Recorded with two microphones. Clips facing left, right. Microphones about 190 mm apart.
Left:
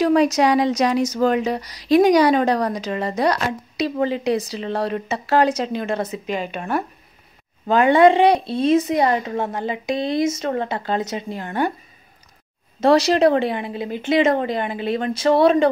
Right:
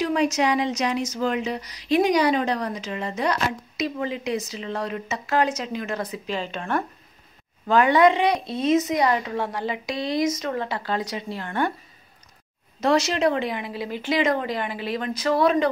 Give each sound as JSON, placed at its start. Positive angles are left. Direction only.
{"t": 0.0, "sound": "speech", "side_deg": 40}
{"t": 12.8, "sound": "speech", "side_deg": 35}